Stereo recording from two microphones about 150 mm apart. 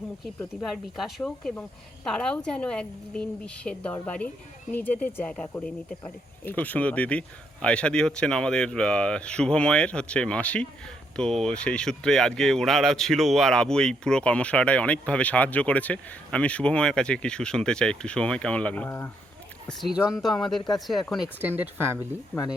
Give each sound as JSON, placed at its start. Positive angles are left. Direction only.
{"t": 0.9, "sound": "speech", "side_deg": 0}
{"t": 19.6, "sound": "speech", "side_deg": 0}
{"t": 21.4, "sound": "speech", "side_deg": -15}